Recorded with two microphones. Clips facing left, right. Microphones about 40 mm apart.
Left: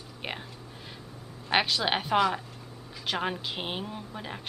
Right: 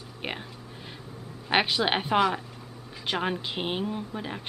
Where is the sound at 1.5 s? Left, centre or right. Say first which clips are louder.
Right 2 dB; centre.